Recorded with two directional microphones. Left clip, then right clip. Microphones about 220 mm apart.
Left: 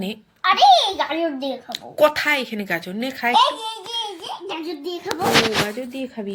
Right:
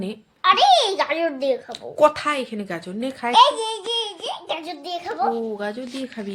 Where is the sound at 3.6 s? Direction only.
15° right (ahead or behind).